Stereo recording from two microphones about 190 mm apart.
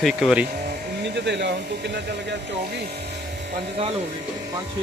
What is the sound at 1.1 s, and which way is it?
Speech, 65° right (ahead or behind).